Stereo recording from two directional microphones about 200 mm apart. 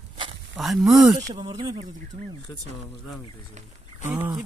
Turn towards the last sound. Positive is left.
turn(degrees=-10)  # may be behind; listen again after turning